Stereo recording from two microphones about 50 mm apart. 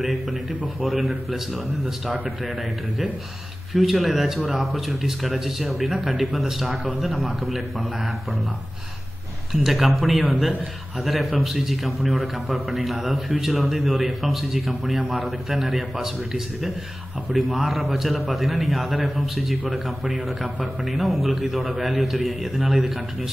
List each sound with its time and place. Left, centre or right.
0.0 s speech: centre
3.7 s speech: centre
9.5 s speech: centre
20.0 s a man's voice: centre
20.8 s speech: centre